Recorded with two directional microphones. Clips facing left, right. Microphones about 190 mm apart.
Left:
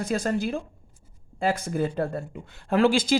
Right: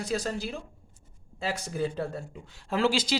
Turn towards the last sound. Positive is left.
turn(degrees=50)  # may be behind; listen again after turning